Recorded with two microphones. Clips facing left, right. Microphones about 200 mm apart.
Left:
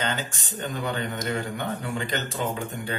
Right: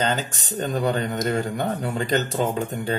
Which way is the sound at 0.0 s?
40° right (ahead or behind).